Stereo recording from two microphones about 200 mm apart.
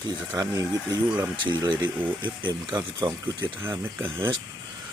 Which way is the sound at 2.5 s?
20° right (ahead or behind).